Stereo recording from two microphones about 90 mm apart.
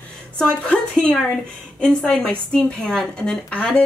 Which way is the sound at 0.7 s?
10° left (ahead or behind).